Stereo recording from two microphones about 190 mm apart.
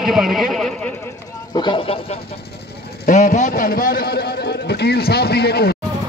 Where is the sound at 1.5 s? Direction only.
25° left (ahead or behind).